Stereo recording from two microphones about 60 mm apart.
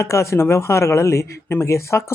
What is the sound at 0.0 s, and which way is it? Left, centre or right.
Speech, left.